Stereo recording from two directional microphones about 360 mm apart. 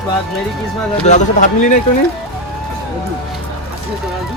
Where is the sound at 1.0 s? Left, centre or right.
Centre.